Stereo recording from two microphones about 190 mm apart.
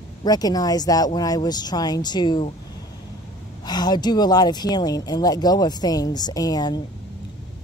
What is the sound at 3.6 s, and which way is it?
Speech, 20° left (ahead or behind).